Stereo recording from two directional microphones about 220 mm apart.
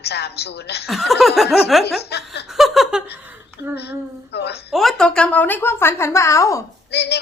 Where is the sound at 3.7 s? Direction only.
50° left (ahead or behind).